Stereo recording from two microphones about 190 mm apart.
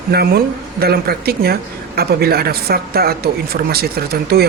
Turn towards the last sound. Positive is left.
turn(degrees=-55)  # may be behind; listen again after turning